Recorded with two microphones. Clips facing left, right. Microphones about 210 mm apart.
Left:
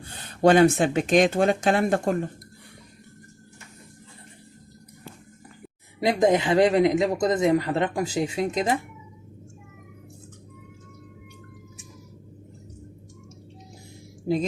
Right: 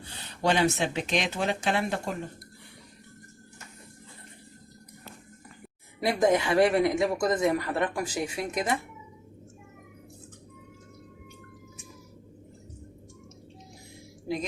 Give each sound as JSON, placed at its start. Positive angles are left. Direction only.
{"t": 0.0, "sound": "speech", "side_deg": 50}
{"t": 6.0, "sound": "a man's voice", "side_deg": 20}